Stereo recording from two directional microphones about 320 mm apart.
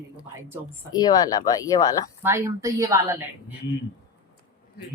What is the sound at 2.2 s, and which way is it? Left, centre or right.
A woman's voice, centre.